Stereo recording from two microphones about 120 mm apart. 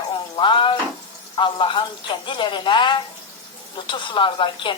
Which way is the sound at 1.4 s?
45° left (ahead or behind).